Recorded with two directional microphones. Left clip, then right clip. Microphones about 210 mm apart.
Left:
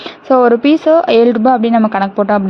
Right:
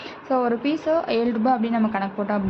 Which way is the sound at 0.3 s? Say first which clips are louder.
Left 13 dB; 50° left (ahead or behind).